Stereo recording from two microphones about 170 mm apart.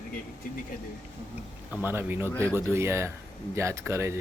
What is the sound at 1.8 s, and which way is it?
Speech, 10° right (ahead or behind).